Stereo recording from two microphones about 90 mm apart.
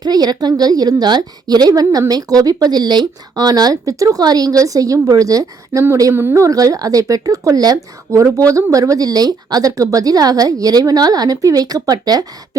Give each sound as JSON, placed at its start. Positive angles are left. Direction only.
{"t": 0.0, "sound": "a woman's voice", "side_deg": -50}
{"t": 6.1, "sound": "speech", "side_deg": -30}
{"t": 8.1, "sound": "a woman's voice", "side_deg": -35}